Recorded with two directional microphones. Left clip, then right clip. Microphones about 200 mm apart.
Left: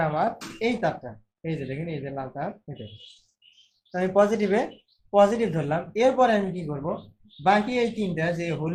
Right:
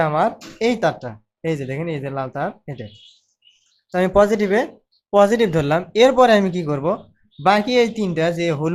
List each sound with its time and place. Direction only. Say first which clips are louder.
0.0 s speech: right 7 dB; 40° right (ahead or behind)
3.9 s speech: right 6 dB; 40° right (ahead or behind)
5.1 s speech: right 5 dB; 45° right (ahead or behind)